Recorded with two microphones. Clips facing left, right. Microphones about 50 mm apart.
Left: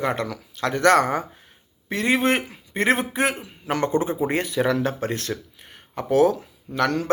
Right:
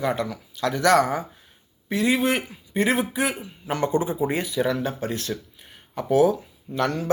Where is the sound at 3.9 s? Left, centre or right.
Left.